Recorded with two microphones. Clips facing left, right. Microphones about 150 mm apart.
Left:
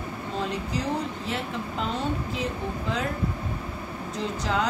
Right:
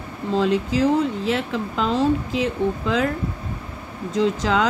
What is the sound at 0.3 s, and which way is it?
Speech, 90° right.